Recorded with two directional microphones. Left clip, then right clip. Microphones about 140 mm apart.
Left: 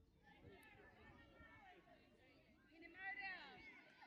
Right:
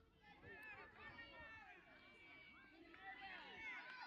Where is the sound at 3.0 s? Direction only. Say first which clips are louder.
Left 5 dB; centre (ahead or behind).